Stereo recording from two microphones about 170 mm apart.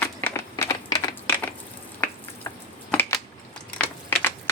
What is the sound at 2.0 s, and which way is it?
Finger snapping, 10° left (ahead or behind).